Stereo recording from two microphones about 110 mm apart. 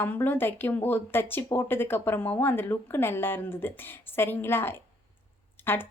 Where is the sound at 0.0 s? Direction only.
20° left (ahead or behind).